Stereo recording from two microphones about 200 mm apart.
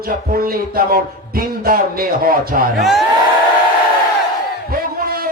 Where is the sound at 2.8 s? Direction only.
Centre (ahead or behind).